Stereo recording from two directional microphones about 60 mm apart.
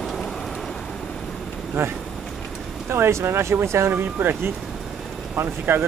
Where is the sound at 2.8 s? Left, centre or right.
Right.